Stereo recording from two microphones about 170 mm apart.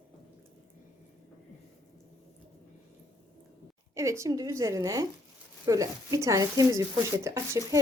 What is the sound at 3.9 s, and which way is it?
Speech, 15° right (ahead or behind).